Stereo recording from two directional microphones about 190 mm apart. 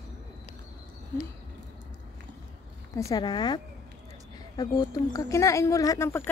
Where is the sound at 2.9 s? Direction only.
20° left (ahead or behind).